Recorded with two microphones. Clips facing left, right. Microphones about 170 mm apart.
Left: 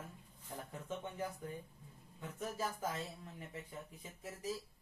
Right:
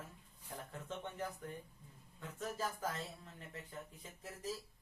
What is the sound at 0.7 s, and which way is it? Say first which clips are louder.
Speech: left 2 dB; 10° left (ahead or behind).